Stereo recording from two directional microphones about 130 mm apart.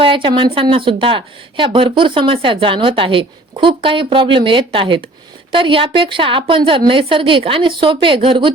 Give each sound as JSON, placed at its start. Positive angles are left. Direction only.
{"t": 0.0, "sound": "a woman's voice", "side_deg": -40}